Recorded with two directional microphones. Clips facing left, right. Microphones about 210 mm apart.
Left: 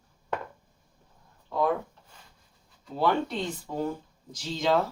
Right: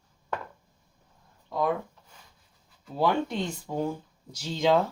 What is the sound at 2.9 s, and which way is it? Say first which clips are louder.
Speech: even; 15° right (ahead or behind).